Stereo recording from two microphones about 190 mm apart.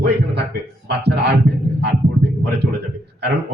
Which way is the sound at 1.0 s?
60° right (ahead or behind).